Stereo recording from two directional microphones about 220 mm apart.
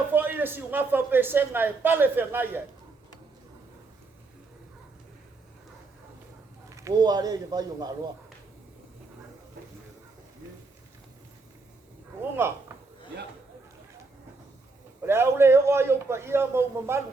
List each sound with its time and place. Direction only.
0.1 s a man's voice: 10° right (ahead or behind)
6.7 s a man's voice: 15° right (ahead or behind)
12.4 s speech: 10° right (ahead or behind)
15.0 s a man's voice: 10° right (ahead or behind)